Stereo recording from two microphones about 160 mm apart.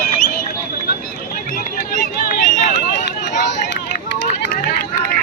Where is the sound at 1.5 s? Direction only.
60° left (ahead or behind).